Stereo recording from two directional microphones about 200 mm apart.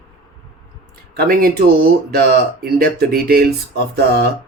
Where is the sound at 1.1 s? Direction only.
50° right (ahead or behind).